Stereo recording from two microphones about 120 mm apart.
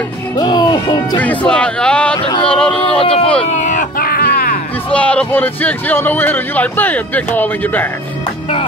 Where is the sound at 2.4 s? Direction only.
5° left (ahead or behind).